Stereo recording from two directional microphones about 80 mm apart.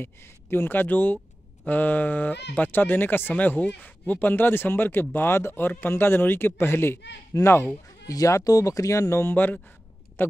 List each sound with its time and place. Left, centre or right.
0.0 s speech: left
8.1 s speech: left
9.3 s speech: left